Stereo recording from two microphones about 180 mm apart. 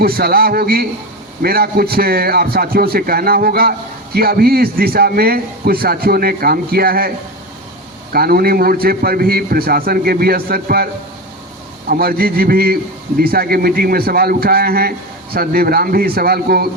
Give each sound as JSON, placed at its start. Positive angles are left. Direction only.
{"t": 0.0, "sound": "speech", "side_deg": -55}
{"t": 8.1, "sound": "speech", "side_deg": -55}
{"t": 11.9, "sound": "speech", "side_deg": -55}